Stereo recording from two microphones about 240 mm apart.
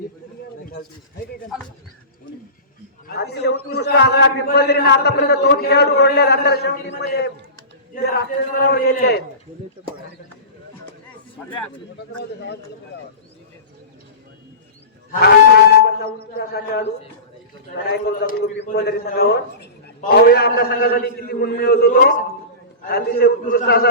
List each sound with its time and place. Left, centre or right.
0.6 s a sound: left
3.1 s a man's voice: left
11.4 s speech: centre
15.1 s a man's voice: left
17.9 s a man's voice: left